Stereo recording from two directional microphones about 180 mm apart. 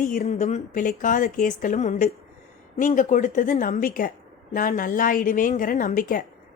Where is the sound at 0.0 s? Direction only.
50° left (ahead or behind).